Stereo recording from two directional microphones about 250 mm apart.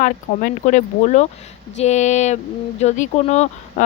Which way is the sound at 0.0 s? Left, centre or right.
Left.